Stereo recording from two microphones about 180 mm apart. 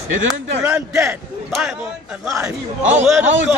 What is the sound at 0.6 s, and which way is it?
Speech, 10° right (ahead or behind).